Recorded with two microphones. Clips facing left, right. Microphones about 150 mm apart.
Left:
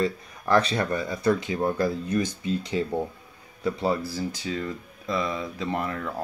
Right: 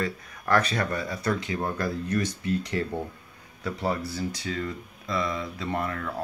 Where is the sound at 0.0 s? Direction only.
25° left (ahead or behind).